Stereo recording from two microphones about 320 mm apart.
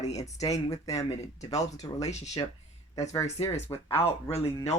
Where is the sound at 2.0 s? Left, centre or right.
Left.